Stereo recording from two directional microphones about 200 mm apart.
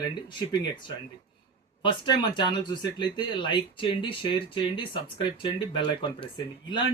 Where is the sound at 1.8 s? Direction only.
25° left (ahead or behind).